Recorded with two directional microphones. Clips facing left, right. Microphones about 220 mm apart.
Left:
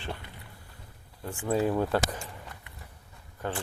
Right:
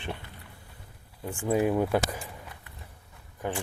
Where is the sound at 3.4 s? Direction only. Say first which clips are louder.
Right 1 dB; 15° right (ahead or behind).